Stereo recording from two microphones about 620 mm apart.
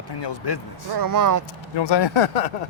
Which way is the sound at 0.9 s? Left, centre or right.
Right.